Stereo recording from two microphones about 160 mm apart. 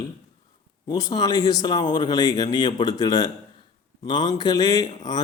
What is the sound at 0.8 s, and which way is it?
Speech, 25° left (ahead or behind).